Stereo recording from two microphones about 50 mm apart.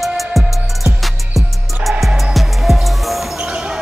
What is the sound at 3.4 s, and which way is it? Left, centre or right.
Basketball bounce, centre.